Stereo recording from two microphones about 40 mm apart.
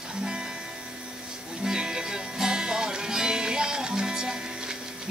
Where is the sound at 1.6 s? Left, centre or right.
Centre.